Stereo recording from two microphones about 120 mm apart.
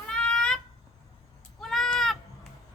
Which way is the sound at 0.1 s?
5° left (ahead or behind).